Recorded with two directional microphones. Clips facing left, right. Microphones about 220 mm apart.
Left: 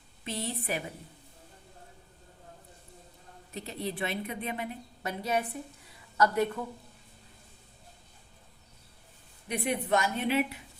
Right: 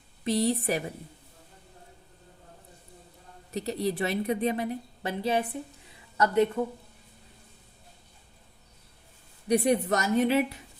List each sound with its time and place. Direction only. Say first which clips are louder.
0.3 s a woman's voice: right 9 dB; 35° right (ahead or behind)
3.5 s a woman's voice: right 7 dB; 40° right (ahead or behind); by 6.5 s 20° right (ahead or behind)
9.5 s a woman's voice: right 6 dB; 40° right (ahead or behind)